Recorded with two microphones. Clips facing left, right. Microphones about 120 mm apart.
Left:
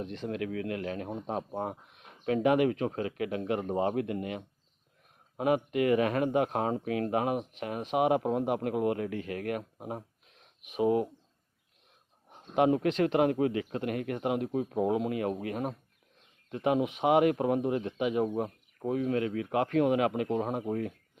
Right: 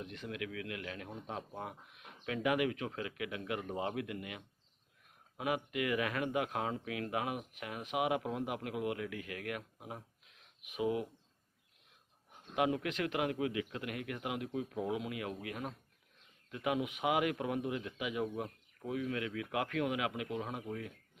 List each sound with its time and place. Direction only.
0.0 s speech: 35° left (ahead or behind)
12.3 s speech: 35° left (ahead or behind)